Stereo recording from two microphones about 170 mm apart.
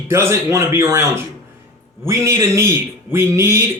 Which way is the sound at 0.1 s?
15° right (ahead or behind).